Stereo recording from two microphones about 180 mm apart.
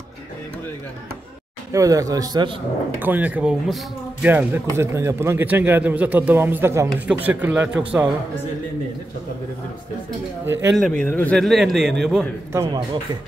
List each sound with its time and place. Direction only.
1.7 s a man's voice: 20° right (ahead or behind)
3.0 s a man's voice: 10° right (ahead or behind)
10.4 s a man's voice: 15° right (ahead or behind)
10.8 s a man's voice: 5° left (ahead or behind)